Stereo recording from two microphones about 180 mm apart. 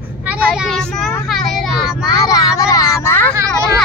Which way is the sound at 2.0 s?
20° left (ahead or behind).